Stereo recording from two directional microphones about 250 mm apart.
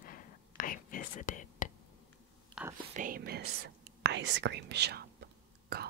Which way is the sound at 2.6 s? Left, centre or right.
Centre.